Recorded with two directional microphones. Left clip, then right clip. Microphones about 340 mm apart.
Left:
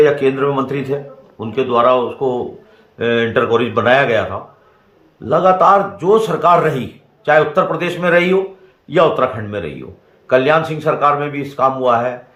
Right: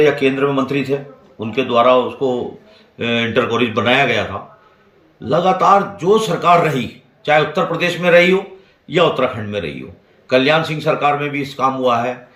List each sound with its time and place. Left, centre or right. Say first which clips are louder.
0.0 s speech: left 1 dB; centre